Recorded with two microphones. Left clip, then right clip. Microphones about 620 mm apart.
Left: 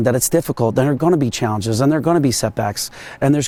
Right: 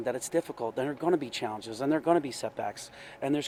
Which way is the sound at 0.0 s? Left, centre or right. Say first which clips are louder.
Left 13 dB; left.